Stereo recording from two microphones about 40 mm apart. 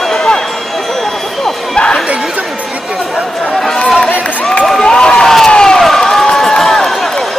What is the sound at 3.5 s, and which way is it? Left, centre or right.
Chatter, centre.